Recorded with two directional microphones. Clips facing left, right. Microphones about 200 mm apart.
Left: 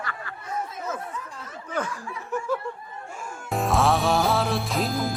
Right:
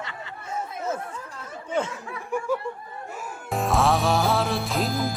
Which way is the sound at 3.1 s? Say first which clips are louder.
Even; 5° right (ahead or behind).